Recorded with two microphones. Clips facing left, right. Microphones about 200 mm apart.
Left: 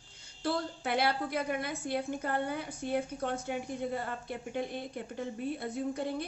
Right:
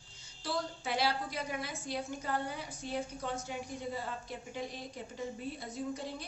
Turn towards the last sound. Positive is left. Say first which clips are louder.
# left 5 dB
turn(degrees=55)  # may be behind; listen again after turning